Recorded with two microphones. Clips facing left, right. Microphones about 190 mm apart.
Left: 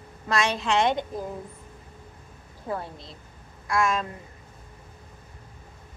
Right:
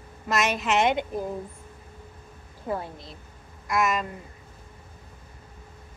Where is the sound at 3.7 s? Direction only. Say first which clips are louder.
Even; 5° right (ahead or behind).